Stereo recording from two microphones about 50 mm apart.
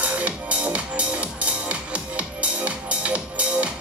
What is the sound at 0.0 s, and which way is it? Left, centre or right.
Music, right.